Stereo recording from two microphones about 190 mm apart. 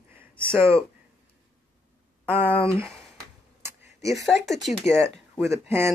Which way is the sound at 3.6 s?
15° right (ahead or behind).